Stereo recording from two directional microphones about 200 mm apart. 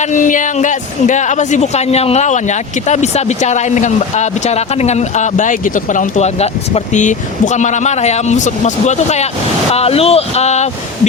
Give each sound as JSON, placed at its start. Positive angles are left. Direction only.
{"t": 0.0, "sound": "speech", "side_deg": 40}